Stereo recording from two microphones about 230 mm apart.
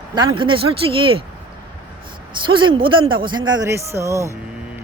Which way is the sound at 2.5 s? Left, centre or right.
Right.